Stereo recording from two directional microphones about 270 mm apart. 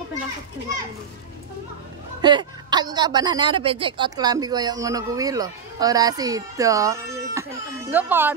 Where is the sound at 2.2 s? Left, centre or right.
Centre.